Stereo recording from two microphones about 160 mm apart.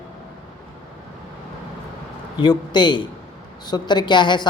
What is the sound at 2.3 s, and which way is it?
Speech, 30° left (ahead or behind).